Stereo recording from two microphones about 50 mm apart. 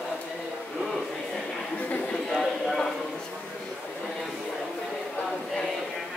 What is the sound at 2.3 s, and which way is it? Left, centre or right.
Clip-clop, centre.